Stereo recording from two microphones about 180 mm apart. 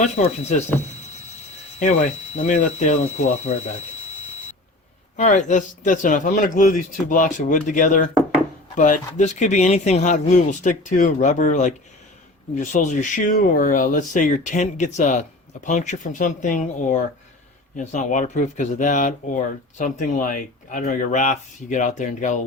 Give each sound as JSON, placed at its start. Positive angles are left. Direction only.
{"t": 0.0, "sound": "speech", "side_deg": 40}
{"t": 1.8, "sound": "speech", "side_deg": 40}
{"t": 5.1, "sound": "speech", "side_deg": 40}